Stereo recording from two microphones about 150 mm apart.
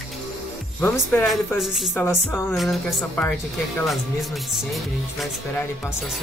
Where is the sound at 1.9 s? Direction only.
15° left (ahead or behind).